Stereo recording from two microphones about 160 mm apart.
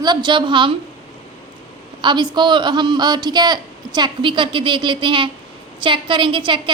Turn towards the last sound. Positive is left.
turn(degrees=-30)  # may be behind; listen again after turning